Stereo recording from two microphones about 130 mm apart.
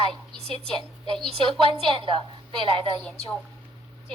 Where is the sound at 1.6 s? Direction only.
45° right (ahead or behind).